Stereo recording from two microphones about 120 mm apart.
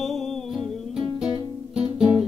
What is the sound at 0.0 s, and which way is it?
Music, centre (ahead or behind).